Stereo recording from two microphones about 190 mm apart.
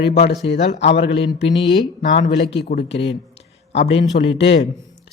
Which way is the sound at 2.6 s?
55° left (ahead or behind).